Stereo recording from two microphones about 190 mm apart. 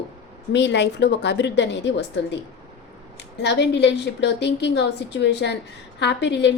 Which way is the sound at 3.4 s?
65° left (ahead or behind).